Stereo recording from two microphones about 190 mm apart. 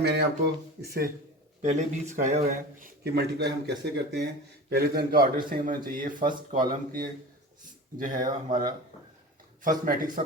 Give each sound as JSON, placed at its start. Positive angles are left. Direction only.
{"t": 0.0, "sound": "a man's voice", "side_deg": -60}
{"t": 1.6, "sound": "a man's voice", "side_deg": -40}
{"t": 9.6, "sound": "speech", "side_deg": -45}